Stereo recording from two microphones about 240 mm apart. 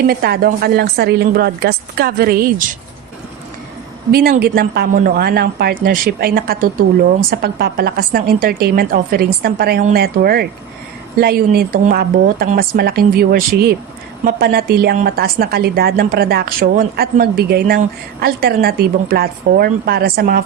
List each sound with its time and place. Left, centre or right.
0.1 s speech: right
4.1 s speech: right